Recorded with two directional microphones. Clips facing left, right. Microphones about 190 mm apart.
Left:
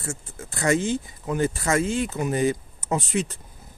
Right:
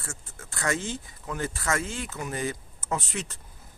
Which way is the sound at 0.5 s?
15° left (ahead or behind).